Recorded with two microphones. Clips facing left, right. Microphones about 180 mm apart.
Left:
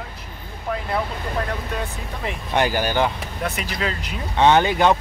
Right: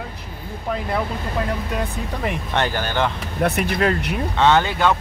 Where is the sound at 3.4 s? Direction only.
60° right (ahead or behind).